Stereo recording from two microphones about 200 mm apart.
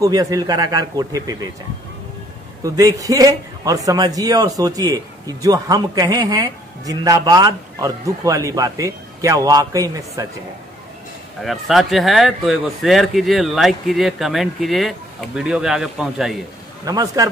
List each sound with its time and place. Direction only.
0.0 s a man's voice: 20° right (ahead or behind)
2.6 s a man's voice: 15° right (ahead or behind)
11.4 s speech: centre (ahead or behind)
16.8 s a man's voice: 15° right (ahead or behind)